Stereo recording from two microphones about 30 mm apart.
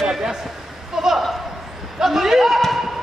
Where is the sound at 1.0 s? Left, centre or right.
Centre.